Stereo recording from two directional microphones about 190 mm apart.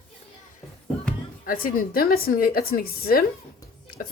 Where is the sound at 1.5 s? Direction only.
50° left (ahead or behind).